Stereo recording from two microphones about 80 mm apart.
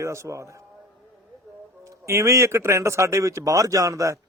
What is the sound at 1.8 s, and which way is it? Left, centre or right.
Speech, right.